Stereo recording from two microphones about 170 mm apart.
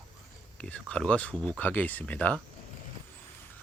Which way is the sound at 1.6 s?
10° left (ahead or behind).